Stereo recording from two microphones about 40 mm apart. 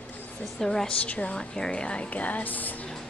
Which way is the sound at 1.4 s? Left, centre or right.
Left.